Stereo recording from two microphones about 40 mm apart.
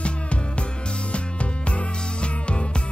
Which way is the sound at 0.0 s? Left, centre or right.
Left.